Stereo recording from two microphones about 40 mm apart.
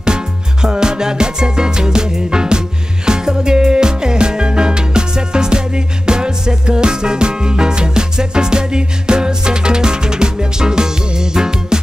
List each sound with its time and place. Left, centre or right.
0.0 s music: centre